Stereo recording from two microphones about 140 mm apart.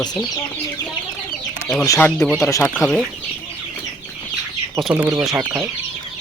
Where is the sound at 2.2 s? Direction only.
Centre (ahead or behind).